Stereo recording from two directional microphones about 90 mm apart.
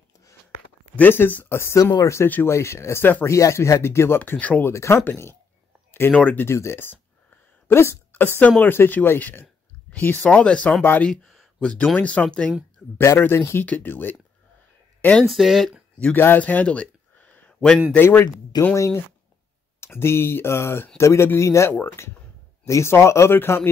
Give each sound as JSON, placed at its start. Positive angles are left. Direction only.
{"t": 0.9, "sound": "speech", "side_deg": 20}
{"t": 3.3, "sound": "speech", "side_deg": 35}
{"t": 4.2, "sound": "speech", "side_deg": 15}
{"t": 4.6, "sound": "speech", "side_deg": 30}
{"t": 6.4, "sound": "a woman's voice", "side_deg": 30}
{"t": 10.8, "sound": "speech", "side_deg": 20}
{"t": 11.1, "sound": "speech", "side_deg": 5}
{"t": 12.9, "sound": "speech", "side_deg": 30}
{"t": 15.2, "sound": "speech", "side_deg": 0}
{"t": 16.2, "sound": "a sound", "side_deg": 20}
{"t": 17.9, "sound": "speech", "side_deg": 25}